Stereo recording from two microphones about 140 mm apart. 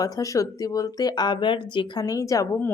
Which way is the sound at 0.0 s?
25° left (ahead or behind).